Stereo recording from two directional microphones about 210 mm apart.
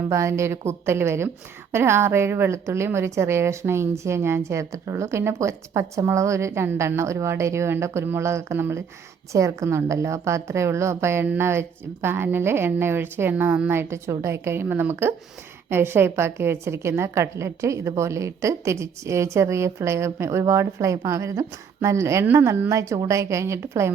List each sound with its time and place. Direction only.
0.1 s a woman's voice: 15° right (ahead or behind)